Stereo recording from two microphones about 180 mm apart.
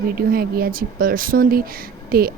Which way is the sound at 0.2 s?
55° right (ahead or behind).